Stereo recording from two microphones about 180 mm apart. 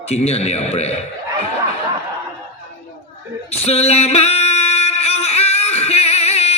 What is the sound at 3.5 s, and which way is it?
Singing, 35° left (ahead or behind).